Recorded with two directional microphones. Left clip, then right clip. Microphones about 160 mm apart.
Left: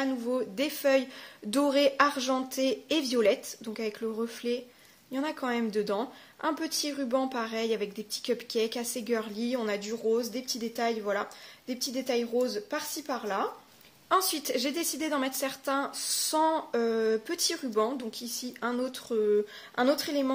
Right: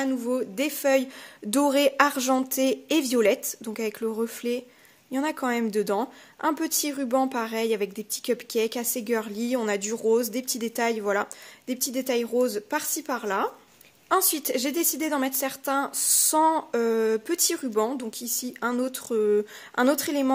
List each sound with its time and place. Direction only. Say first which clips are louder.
0.0 s a woman's voice: right 3 dB; 40° right (ahead or behind)
14.0 s a woman's voice: right 3 dB; 35° right (ahead or behind)